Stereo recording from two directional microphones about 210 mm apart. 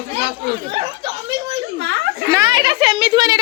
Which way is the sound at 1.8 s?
60° right (ahead or behind).